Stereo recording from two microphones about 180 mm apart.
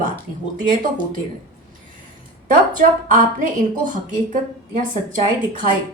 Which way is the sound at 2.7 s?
45° right (ahead or behind).